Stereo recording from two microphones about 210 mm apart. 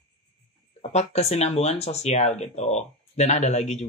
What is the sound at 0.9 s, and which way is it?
Speech, 30° left (ahead or behind).